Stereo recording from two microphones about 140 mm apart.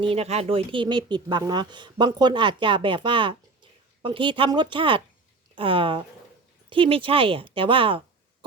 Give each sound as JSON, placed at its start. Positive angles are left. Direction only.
{"t": 0.0, "sound": "speech", "side_deg": -45}